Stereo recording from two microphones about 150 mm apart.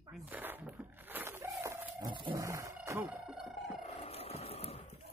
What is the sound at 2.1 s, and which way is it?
Wild animals, 30° right (ahead or behind).